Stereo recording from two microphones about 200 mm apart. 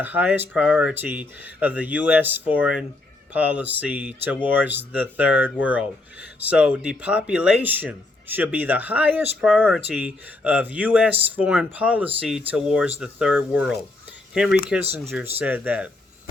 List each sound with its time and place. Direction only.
0.0 s speech: 10° right (ahead or behind)
14.9 s speech: 10° right (ahead or behind)